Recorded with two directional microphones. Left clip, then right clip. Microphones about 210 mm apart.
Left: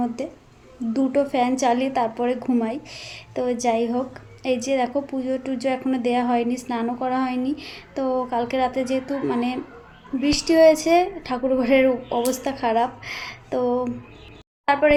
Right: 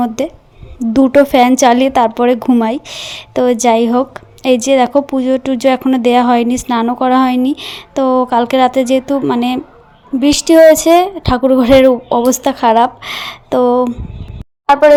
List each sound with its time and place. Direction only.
0.9 s speech: 45° right (ahead or behind)